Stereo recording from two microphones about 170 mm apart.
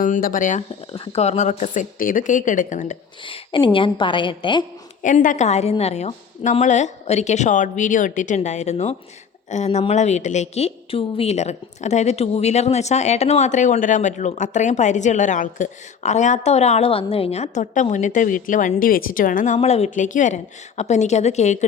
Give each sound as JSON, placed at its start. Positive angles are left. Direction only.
{"t": 0.0, "sound": "a woman's voice", "side_deg": 50}
{"t": 0.9, "sound": "a woman's voice", "side_deg": 35}
{"t": 3.2, "sound": "a woman's voice", "side_deg": 30}
{"t": 5.0, "sound": "a woman's voice", "side_deg": 50}
{"t": 19.5, "sound": "a woman's voice", "side_deg": 40}